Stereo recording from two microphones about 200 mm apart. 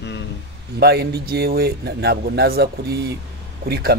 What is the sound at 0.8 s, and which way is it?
Speech, 55° right (ahead or behind).